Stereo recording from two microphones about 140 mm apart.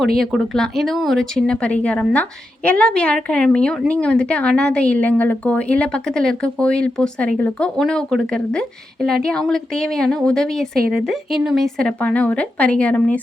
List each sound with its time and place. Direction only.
0.2 s a woman's voice: centre (ahead or behind)
10.8 s speech: 90° right
11.0 s a woman's voice: centre (ahead or behind)